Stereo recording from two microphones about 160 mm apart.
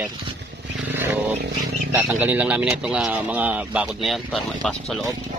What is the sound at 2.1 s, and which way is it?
Speech, 10° right (ahead or behind).